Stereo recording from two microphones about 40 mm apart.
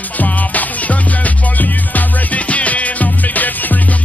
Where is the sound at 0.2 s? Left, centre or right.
Left.